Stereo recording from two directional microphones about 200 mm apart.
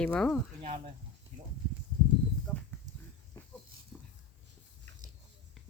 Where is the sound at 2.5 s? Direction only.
10° left (ahead or behind).